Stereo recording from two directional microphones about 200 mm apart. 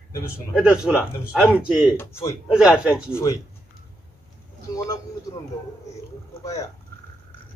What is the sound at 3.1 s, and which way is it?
Speech, 15° left (ahead or behind).